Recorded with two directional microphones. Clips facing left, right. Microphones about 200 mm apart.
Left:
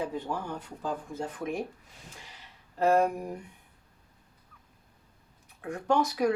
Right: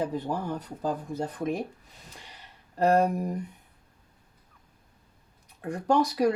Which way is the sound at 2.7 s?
40° right (ahead or behind).